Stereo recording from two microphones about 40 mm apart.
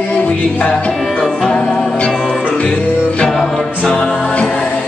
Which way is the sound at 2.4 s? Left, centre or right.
Left.